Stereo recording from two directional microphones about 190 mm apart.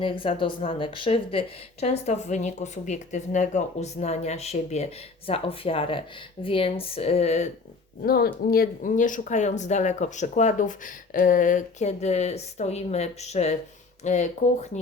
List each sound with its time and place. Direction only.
0.0 s speech: 25° left (ahead or behind)
8.0 s speech: 50° left (ahead or behind)